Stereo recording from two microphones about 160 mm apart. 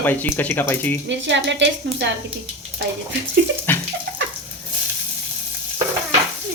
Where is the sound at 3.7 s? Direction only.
10° left (ahead or behind).